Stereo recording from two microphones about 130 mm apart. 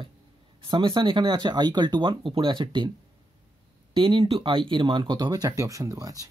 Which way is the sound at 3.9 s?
40° right (ahead or behind).